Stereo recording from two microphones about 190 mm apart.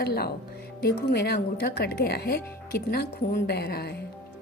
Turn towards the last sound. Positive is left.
turn(degrees=55)  # may be behind; listen again after turning